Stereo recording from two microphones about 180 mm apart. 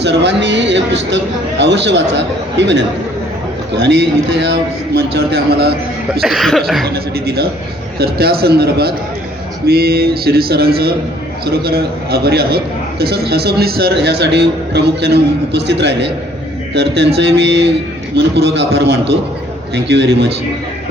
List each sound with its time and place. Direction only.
0.0 s a man's voice: 70° right (ahead or behind)
6.2 s cough: centre (ahead or behind)
6.8 s a man's voice: 60° right (ahead or behind)